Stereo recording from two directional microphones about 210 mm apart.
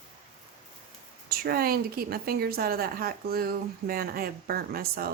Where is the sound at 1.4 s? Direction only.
45° right (ahead or behind).